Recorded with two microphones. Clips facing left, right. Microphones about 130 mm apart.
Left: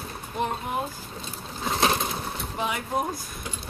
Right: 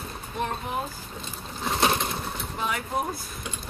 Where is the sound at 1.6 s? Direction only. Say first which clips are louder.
Even; centre (ahead or behind).